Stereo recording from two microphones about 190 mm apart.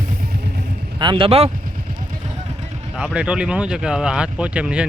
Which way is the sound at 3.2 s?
5° right (ahead or behind).